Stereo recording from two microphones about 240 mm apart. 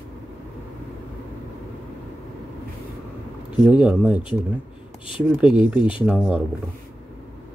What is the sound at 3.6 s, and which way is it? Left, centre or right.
Speech, centre.